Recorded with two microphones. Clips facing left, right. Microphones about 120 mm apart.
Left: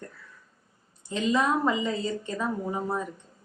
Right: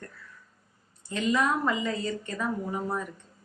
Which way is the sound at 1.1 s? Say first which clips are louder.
Left 1 dB; 20° left (ahead or behind).